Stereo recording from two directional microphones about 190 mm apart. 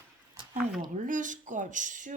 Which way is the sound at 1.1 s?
40° right (ahead or behind).